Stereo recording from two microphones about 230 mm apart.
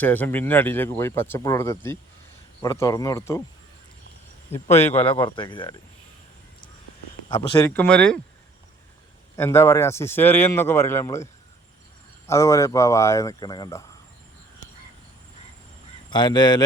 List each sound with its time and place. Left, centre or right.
0.0 s a man's voice: centre
4.5 s a man's voice: centre
5.1 s speech: centre
7.3 s a man's voice: centre
9.3 s a man's voice: centre
12.3 s a man's voice: centre
16.0 s speech: centre